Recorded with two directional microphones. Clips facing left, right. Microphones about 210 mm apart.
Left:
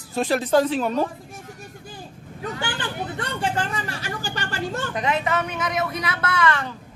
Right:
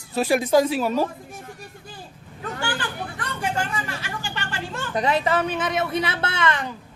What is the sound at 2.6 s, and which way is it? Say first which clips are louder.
Speech: right 2 dB; 25° left (ahead or behind).